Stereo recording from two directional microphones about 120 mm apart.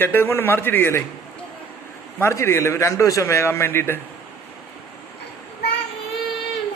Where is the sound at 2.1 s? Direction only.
20° left (ahead or behind).